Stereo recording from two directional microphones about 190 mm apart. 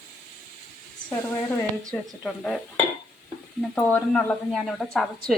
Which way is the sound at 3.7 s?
5° left (ahead or behind).